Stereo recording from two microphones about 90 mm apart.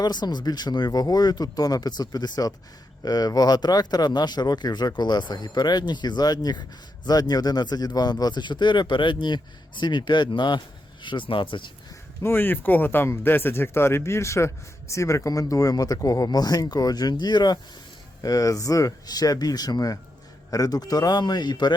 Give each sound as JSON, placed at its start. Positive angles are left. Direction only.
{"t": 0.0, "sound": "speech", "side_deg": 50}
{"t": 12.2, "sound": "speech", "side_deg": 25}